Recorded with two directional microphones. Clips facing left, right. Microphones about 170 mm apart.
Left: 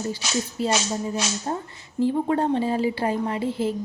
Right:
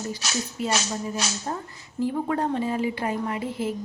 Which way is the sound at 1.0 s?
25° left (ahead or behind).